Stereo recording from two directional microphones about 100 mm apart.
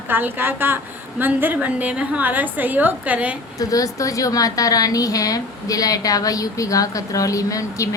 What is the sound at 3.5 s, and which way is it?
A woman's voice, 35° left (ahead or behind).